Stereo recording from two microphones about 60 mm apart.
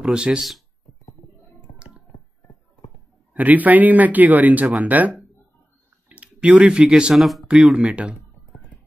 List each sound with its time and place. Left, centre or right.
0.0 s speech: centre
3.3 s speech: right
7.2 s speech: centre
7.4 s speech: centre